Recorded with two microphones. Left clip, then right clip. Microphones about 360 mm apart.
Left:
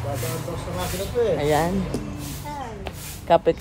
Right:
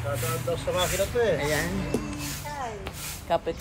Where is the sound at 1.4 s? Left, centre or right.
Centre.